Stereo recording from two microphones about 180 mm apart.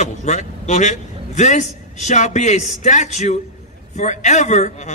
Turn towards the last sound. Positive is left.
turn(degrees=40)  # may be behind; listen again after turning